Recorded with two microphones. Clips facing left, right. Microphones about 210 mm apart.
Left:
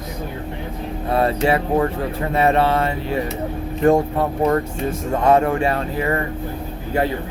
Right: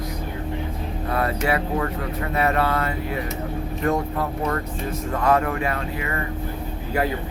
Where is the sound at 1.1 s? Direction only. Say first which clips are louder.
Left 5 dB; 25° left (ahead or behind).